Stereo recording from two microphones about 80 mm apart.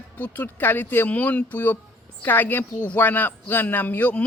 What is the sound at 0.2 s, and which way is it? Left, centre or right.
Speech, left.